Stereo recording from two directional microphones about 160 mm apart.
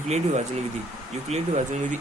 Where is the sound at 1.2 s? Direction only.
45° right (ahead or behind).